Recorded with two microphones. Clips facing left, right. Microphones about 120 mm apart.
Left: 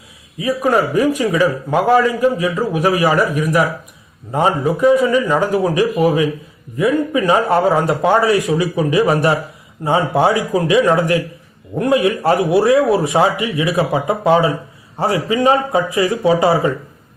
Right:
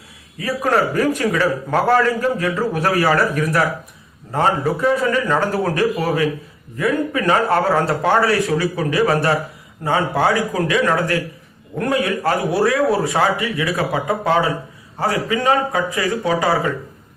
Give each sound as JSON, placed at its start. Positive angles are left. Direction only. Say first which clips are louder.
{"t": 0.3, "sound": "a man's voice", "louder": "left 3 dB", "side_deg": 15}